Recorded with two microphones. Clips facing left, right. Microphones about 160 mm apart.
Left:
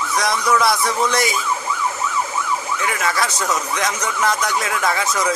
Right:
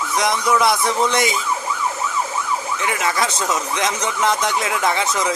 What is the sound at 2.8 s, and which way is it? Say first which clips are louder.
Speech: right 1 dB; 25° right (ahead or behind).